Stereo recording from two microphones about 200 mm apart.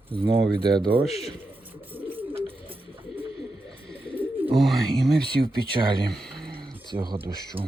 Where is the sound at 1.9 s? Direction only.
10° right (ahead or behind).